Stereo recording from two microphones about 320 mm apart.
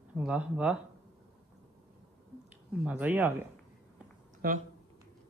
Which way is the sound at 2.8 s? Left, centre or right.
Centre.